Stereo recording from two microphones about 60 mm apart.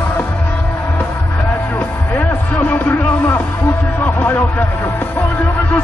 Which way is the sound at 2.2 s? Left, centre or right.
Centre.